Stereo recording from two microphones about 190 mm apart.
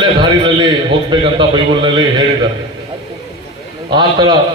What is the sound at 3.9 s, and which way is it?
Speech, 25° right (ahead or behind).